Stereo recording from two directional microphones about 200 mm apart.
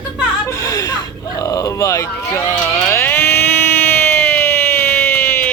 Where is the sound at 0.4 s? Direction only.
15° left (ahead or behind).